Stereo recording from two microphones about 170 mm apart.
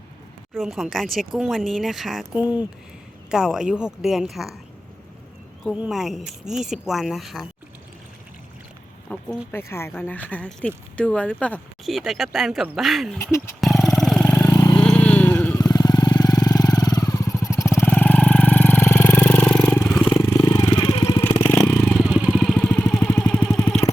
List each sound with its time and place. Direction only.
0.5 s speech: centre (ahead or behind)
5.7 s speech: 5° right (ahead or behind)
9.0 s speech: 10° left (ahead or behind)
13.1 s speech: 15° left (ahead or behind)
13.6 s vehicle: centre (ahead or behind)
14.3 s vehicle: 15° left (ahead or behind)
14.8 s vehicle: 5° left (ahead or behind)
15.5 s vehicle: 20° left (ahead or behind)
21.4 s vehicle: 10° left (ahead or behind)
21.9 s vehicle: 5° right (ahead or behind)